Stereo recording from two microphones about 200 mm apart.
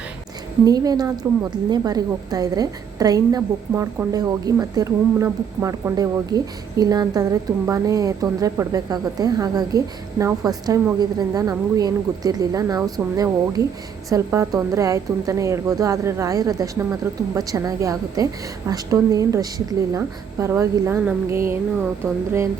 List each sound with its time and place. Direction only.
0.6 s a woman's voice: 20° right (ahead or behind)